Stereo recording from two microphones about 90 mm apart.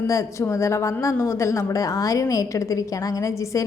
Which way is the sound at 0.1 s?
35° left (ahead or behind).